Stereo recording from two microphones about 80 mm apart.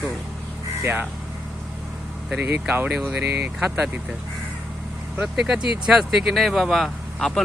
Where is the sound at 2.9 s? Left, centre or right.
Centre.